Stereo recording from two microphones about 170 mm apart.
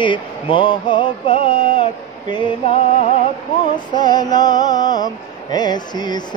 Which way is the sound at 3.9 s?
25° left (ahead or behind).